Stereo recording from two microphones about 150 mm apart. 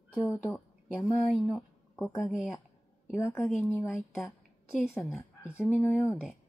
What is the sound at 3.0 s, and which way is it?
Speech, 15° left (ahead or behind).